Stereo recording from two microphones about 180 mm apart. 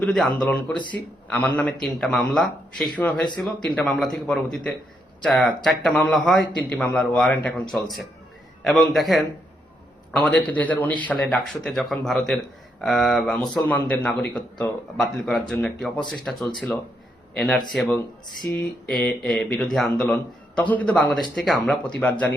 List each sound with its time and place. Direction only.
0.0 s speech: 5° left (ahead or behind)